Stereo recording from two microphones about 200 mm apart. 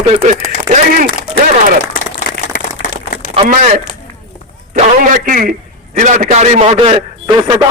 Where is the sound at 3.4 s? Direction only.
40° right (ahead or behind).